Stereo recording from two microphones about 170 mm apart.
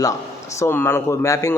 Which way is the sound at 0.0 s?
15° left (ahead or behind).